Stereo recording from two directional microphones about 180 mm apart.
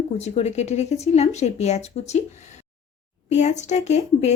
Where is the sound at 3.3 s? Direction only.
40° left (ahead or behind).